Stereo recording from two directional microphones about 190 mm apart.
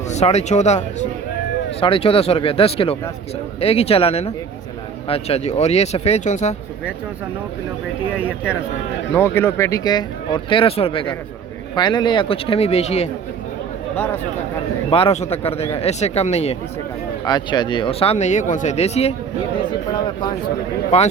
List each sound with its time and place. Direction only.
0.1 s speech: 35° left (ahead or behind)
9.1 s speech: 15° left (ahead or behind); by 13.1 s 35° left (ahead or behind)
14.8 s speech: 30° left (ahead or behind)
17.2 s speech: 25° left (ahead or behind)